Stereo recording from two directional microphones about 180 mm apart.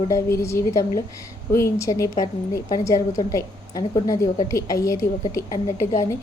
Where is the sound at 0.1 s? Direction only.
15° left (ahead or behind).